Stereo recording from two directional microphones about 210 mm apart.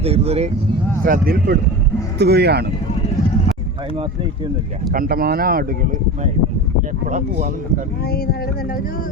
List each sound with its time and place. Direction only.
0.0 s speech: 30° right (ahead or behind)
1.0 s speech: 45° right (ahead or behind)
4.9 s speech: 45° right (ahead or behind)